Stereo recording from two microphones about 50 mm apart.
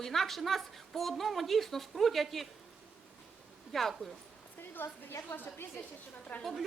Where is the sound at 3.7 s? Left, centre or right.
Centre.